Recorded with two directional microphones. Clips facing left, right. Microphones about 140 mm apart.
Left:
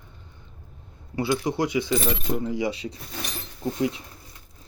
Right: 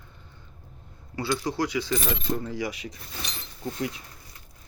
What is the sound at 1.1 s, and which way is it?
Coin, 20° left (ahead or behind).